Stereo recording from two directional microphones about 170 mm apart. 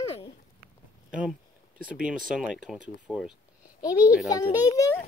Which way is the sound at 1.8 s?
5° right (ahead or behind).